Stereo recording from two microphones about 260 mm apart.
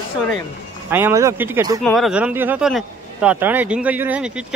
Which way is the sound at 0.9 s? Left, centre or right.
Centre.